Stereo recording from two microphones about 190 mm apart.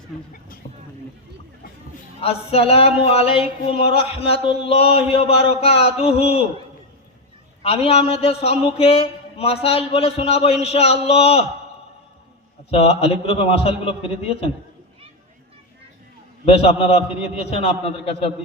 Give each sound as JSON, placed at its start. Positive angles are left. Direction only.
{"t": 2.2, "sound": "speech", "side_deg": 30}
{"t": 7.6, "sound": "speech", "side_deg": 30}
{"t": 12.7, "sound": "speech", "side_deg": 35}
{"t": 16.5, "sound": "speech", "side_deg": 30}